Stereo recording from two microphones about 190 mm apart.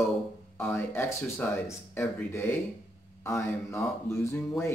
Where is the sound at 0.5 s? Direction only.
10° left (ahead or behind).